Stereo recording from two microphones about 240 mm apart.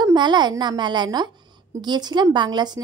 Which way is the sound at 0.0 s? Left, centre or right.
Centre.